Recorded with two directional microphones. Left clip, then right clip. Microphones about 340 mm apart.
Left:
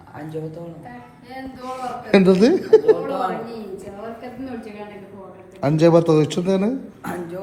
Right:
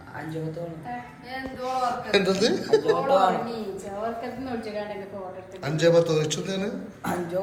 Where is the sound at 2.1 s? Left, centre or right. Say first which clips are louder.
Left 9 dB; left.